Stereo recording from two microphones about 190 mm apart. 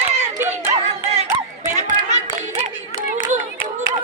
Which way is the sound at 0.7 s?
35° right (ahead or behind).